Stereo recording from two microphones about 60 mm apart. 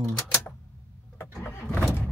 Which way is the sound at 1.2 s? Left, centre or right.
Left.